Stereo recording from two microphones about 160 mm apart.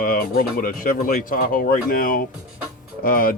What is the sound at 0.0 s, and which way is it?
Speech, 60° left (ahead or behind).